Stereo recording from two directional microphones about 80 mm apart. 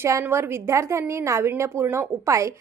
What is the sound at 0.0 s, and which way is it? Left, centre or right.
A woman's voice, right.